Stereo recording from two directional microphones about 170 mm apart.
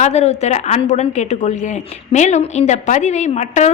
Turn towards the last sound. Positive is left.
turn(degrees=40)  # may be behind; listen again after turning